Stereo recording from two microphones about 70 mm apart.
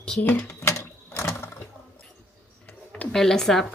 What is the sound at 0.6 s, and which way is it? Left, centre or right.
Ratchet, left.